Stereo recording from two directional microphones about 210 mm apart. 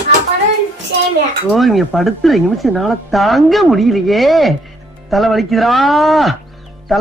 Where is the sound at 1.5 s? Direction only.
Centre (ahead or behind).